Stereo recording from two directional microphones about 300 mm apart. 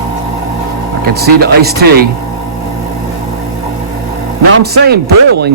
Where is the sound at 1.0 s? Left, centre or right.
Right.